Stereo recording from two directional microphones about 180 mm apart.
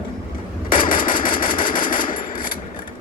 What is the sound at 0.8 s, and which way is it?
Machine gun, 50° left (ahead or behind).